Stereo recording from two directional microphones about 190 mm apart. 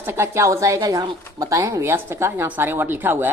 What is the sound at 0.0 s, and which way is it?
A woman's voice, 15° right (ahead or behind).